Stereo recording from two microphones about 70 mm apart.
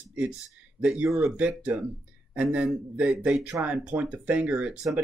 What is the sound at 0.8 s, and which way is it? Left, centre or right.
Speech, centre.